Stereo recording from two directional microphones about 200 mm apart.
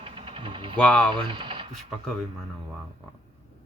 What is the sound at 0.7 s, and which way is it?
Speech, 5° left (ahead or behind).